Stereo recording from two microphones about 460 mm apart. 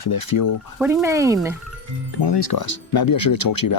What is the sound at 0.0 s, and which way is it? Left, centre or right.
Speech, left.